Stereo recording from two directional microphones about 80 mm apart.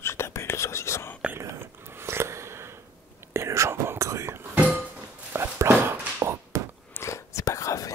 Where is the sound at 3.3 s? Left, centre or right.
Right.